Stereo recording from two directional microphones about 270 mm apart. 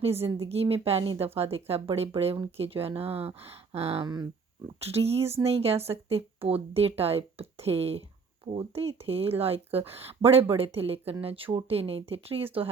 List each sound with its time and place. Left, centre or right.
0.0 s a woman's voice: right